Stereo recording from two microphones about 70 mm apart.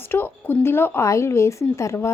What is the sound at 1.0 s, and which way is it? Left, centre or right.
A woman's voice, left.